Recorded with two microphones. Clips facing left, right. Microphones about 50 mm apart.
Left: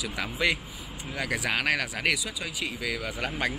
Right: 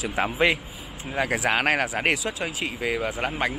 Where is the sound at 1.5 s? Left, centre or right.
Right.